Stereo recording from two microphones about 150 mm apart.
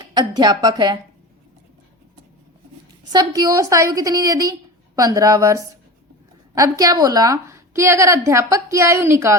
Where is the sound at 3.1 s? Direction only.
25° right (ahead or behind).